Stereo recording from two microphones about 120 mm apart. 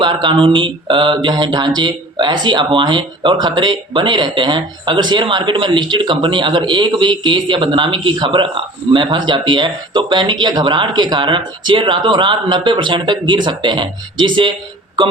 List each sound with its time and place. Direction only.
0.0 s speech: 40° right (ahead or behind)